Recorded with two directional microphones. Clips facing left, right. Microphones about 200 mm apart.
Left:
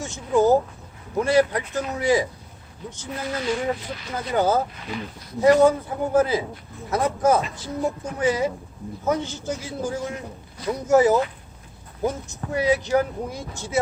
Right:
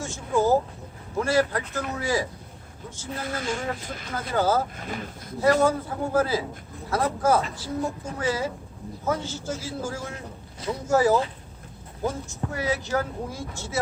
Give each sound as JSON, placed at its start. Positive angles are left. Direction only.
{"t": 0.0, "sound": "a sound", "side_deg": 20}
{"t": 1.2, "sound": "speech", "side_deg": 20}
{"t": 3.3, "sound": "speech", "side_deg": -45}
{"t": 4.3, "sound": "speech", "side_deg": 20}
{"t": 4.8, "sound": "speech", "side_deg": -45}
{"t": 5.4, "sound": "speech", "side_deg": 20}